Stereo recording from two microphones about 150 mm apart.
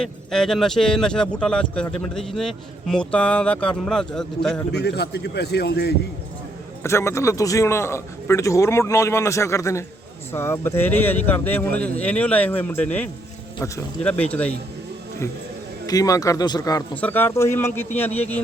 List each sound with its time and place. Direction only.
0.0 s speech: 5° left (ahead or behind)
4.7 s a man's voice: 90° left
6.8 s a man's voice: 20° left (ahead or behind)
15.9 s a man's voice: 25° left (ahead or behind)
17.0 s speech: 15° left (ahead or behind)